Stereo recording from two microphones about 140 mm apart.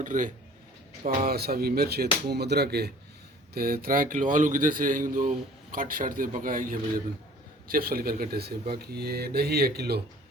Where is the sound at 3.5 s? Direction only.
90° right.